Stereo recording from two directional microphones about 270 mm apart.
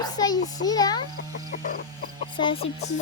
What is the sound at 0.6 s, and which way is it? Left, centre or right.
Speech, centre.